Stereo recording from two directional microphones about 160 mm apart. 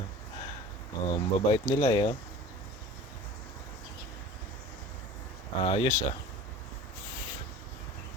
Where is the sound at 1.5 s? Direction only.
25° left (ahead or behind).